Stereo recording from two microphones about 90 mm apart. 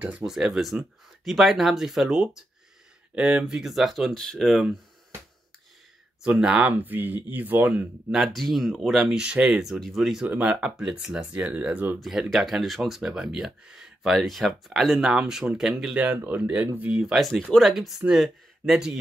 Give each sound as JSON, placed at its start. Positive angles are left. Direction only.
{"t": 0.2, "sound": "speech", "side_deg": -5}
{"t": 6.2, "sound": "speech", "side_deg": -10}
{"t": 8.1, "sound": "speech", "side_deg": 0}
{"t": 10.2, "sound": "speech", "side_deg": -15}
{"t": 10.6, "sound": "speech", "side_deg": -5}
{"t": 12.0, "sound": "speech", "side_deg": 0}
{"t": 16.9, "sound": "speech", "side_deg": -5}